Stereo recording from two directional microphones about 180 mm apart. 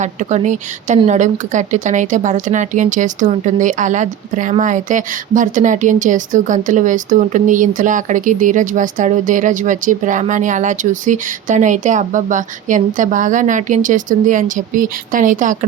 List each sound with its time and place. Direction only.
0.0 s a woman's voice: 40° right (ahead or behind)